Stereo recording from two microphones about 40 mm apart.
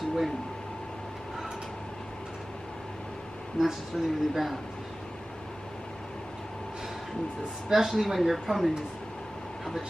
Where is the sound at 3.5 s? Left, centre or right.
Centre.